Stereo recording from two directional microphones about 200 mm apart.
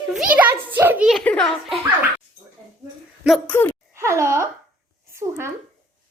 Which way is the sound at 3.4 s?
10° left (ahead or behind).